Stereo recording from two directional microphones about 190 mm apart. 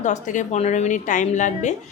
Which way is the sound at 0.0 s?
40° left (ahead or behind).